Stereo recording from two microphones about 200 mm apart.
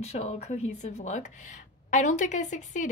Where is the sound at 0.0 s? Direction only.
35° left (ahead or behind).